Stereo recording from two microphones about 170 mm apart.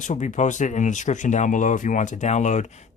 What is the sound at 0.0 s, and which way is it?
Speech, 45° left (ahead or behind).